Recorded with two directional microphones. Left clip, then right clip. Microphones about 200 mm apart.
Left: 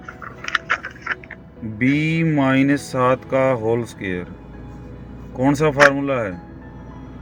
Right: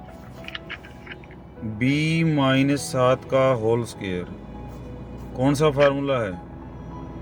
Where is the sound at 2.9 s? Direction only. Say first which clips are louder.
Left 1 dB; 5° left (ahead or behind).